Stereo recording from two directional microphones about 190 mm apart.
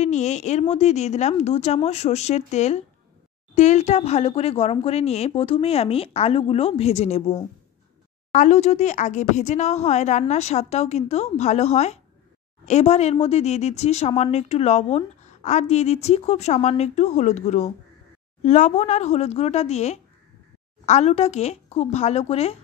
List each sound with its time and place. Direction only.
0.0 s speech: 35° left (ahead or behind)